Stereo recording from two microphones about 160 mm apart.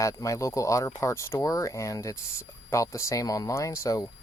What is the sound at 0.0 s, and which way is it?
Speech, 20° left (ahead or behind).